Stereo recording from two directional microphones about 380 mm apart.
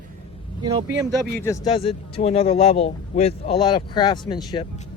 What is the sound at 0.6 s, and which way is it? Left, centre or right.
Speech, centre.